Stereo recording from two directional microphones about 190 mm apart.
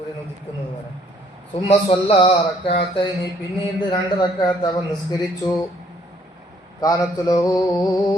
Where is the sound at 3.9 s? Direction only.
20° left (ahead or behind).